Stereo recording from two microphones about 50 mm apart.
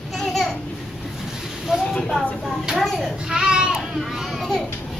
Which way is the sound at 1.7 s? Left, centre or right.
Centre.